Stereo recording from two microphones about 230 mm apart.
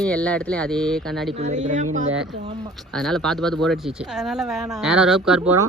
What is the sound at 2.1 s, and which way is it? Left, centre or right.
Speech, centre.